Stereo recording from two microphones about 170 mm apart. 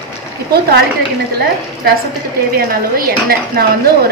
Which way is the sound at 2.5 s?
60° right (ahead or behind).